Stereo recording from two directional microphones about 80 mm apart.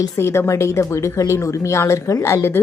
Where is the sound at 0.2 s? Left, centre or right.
Left.